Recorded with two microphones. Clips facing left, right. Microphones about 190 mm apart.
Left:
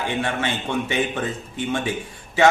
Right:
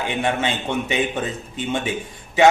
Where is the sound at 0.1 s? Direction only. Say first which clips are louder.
Right 4 dB; 20° right (ahead or behind).